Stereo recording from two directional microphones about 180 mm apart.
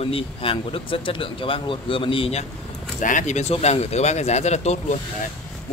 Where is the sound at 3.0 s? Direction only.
45° left (ahead or behind).